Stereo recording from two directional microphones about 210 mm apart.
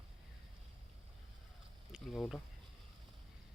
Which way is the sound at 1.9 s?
Centre (ahead or behind).